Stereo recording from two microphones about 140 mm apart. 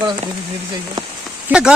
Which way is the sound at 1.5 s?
5° right (ahead or behind).